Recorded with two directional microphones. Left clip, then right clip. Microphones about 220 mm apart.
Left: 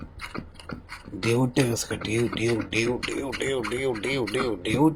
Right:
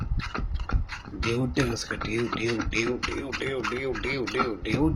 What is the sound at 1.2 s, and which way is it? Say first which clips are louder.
Speech: left 4 dB; 30° left (ahead or behind).